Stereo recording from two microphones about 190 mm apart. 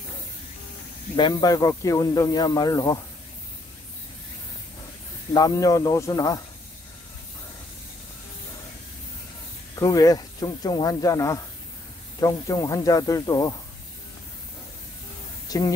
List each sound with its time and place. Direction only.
1.1 s speech: 25° left (ahead or behind)
5.3 s speech: 20° left (ahead or behind)
9.8 s speech: 20° left (ahead or behind)
15.4 s a sound: 20° left (ahead or behind)